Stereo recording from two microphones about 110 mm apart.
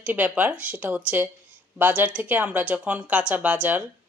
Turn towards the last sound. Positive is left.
turn(degrees=-15)  # may be behind; listen again after turning